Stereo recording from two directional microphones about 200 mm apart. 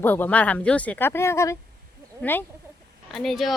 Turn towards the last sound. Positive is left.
turn(degrees=0)  # may be behind; listen again after turning